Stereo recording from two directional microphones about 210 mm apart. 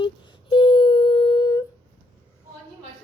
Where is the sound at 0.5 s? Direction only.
25° left (ahead or behind).